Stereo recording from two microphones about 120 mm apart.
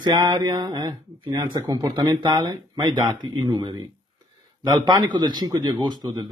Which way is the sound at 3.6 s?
50° right (ahead or behind).